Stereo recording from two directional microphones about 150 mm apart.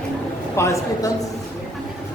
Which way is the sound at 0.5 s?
20° left (ahead or behind).